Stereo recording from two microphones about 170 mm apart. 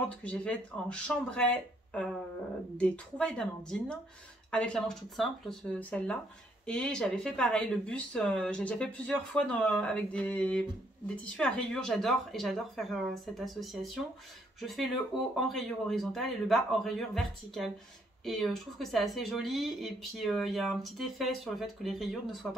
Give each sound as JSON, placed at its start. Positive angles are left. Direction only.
{"t": 0.2, "sound": "speech", "side_deg": 5}
{"t": 15.1, "sound": "speech", "side_deg": 0}